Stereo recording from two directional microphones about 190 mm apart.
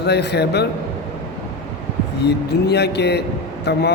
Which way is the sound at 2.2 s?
60° left (ahead or behind).